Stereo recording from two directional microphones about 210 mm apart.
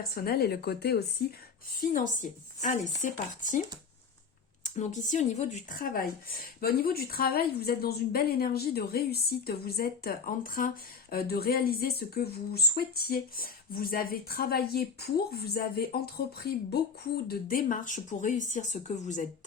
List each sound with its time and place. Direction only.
0.1 s a woman's voice: 45° left (ahead or behind)
1.8 s speech: 40° left (ahead or behind)
4.8 s a woman's voice: 35° left (ahead or behind)